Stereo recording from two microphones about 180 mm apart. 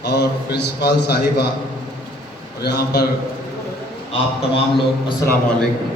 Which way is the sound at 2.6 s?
65° left (ahead or behind).